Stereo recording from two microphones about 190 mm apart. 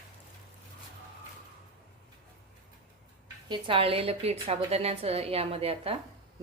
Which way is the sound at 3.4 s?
25° right (ahead or behind).